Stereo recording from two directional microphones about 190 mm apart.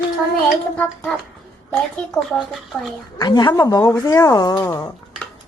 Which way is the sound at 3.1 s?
20° left (ahead or behind).